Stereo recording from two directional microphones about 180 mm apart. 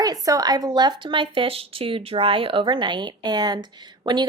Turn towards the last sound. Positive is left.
turn(degrees=-25)  # may be behind; listen again after turning